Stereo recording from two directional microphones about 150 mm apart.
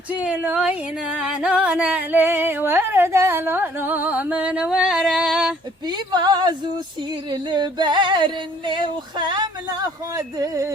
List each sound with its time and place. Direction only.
0.1 s music: 10° right (ahead or behind)
5.8 s female singing: 30° right (ahead or behind)